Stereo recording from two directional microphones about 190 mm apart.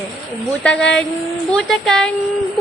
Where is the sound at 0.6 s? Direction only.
5° left (ahead or behind).